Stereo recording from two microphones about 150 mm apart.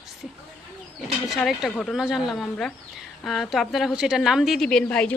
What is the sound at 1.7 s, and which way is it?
A woman's voice, centre (ahead or behind).